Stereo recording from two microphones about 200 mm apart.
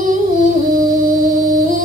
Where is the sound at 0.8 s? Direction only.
40° right (ahead or behind).